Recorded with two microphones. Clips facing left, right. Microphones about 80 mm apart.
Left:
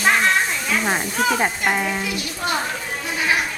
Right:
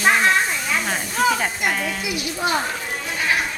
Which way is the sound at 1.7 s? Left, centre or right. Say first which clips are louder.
Left 3 dB; centre.